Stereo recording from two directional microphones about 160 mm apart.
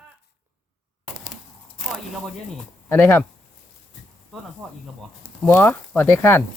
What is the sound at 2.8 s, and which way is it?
Speech, 15° left (ahead or behind).